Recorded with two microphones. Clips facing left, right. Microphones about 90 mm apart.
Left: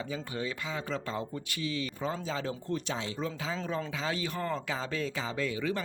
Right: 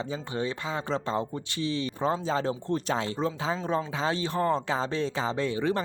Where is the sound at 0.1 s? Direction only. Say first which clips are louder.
Right 4 dB; 30° right (ahead or behind).